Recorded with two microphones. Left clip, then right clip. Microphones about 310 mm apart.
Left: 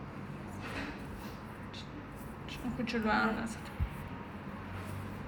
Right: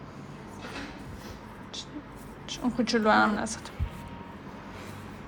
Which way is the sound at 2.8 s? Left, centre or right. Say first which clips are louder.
Right 9 dB; right.